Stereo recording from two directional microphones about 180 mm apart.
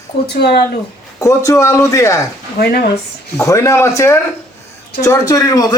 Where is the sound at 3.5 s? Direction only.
15° left (ahead or behind).